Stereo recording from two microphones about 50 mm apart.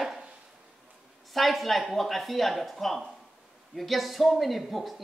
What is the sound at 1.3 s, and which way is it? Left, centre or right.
Speech, centre.